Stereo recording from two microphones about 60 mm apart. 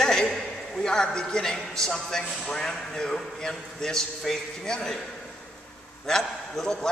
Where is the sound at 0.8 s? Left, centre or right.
Centre.